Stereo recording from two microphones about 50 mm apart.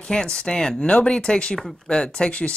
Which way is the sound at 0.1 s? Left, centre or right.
Centre.